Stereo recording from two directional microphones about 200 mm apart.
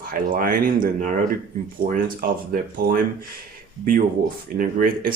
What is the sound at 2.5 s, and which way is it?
Speech, 45° right (ahead or behind).